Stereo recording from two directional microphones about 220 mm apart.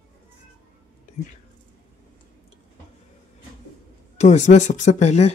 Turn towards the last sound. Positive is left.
turn(degrees=30)  # may be behind; listen again after turning